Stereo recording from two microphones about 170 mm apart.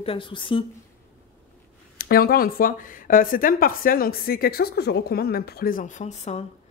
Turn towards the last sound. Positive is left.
turn(degrees=40)  # may be behind; listen again after turning